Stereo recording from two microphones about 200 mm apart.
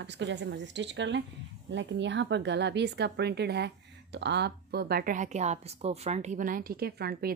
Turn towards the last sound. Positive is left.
turn(degrees=-50)  # may be behind; listen again after turning